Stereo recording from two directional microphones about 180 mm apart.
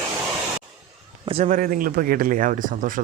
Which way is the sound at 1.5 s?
50° right (ahead or behind).